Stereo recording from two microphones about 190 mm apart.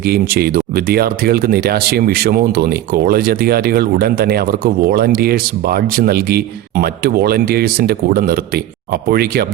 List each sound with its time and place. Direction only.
0.0 s speech: 55° right (ahead or behind)